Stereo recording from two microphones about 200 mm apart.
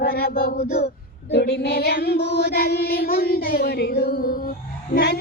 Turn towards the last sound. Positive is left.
turn(degrees=55)  # may be behind; listen again after turning